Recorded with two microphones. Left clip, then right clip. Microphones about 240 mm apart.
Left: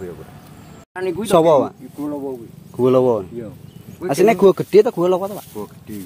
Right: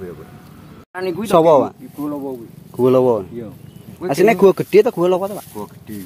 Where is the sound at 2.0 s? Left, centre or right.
Right.